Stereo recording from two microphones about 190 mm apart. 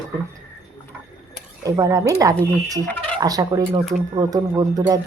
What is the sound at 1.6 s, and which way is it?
Speech, 20° right (ahead or behind).